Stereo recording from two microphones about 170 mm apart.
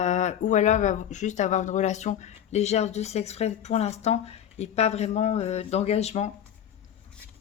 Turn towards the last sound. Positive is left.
turn(degrees=40)  # may be behind; listen again after turning